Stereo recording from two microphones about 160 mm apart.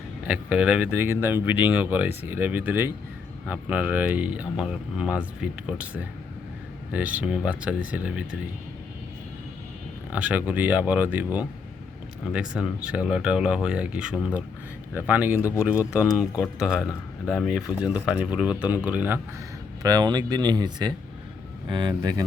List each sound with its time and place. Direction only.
0.3 s speech: 5° right (ahead or behind)
10.1 s speech: 10° right (ahead or behind)
19.8 s speech: 25° right (ahead or behind)